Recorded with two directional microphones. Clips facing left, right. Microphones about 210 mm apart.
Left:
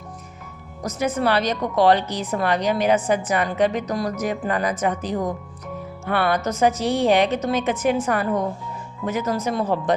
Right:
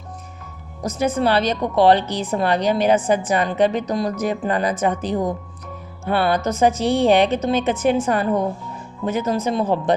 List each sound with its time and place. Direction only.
0.8 s a woman's voice: 30° right (ahead or behind)